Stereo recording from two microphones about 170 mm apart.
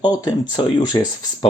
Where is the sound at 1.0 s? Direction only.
25° left (ahead or behind).